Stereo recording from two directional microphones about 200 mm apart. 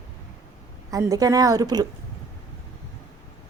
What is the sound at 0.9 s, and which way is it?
Speech, 15° right (ahead or behind).